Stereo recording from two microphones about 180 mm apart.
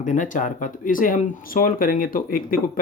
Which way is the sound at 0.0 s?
45° left (ahead or behind).